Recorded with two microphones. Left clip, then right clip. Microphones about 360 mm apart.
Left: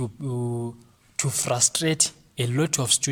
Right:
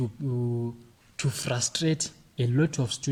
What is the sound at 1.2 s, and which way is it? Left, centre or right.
Speech, centre.